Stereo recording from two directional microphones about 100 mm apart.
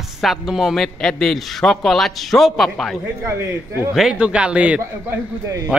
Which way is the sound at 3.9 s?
5° right (ahead or behind).